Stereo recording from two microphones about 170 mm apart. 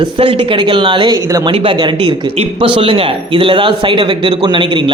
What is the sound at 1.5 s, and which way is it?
A man's voice, 30° right (ahead or behind).